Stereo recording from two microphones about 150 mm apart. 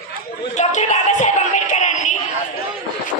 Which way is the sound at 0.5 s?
50° left (ahead or behind).